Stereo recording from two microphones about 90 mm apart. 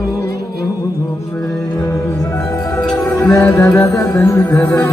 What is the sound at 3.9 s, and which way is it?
Music, 35° left (ahead or behind).